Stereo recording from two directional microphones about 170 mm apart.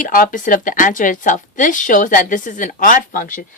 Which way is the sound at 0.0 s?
50° left (ahead or behind).